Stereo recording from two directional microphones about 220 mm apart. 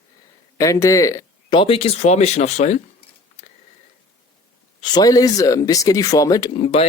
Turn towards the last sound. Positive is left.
turn(degrees=25)  # may be behind; listen again after turning